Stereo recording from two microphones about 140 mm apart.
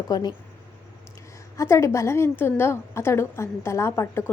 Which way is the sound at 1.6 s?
20° left (ahead or behind).